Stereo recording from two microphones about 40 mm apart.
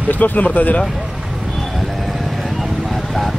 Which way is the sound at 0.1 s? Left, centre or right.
Left.